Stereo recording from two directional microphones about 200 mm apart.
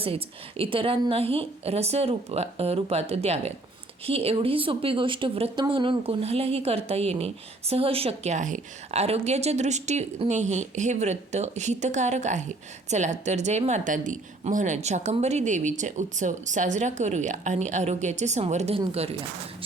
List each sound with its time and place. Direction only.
0.0 s speech: 30° right (ahead or behind)